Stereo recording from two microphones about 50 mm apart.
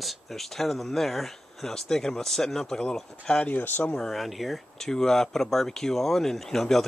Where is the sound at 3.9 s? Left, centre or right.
Centre.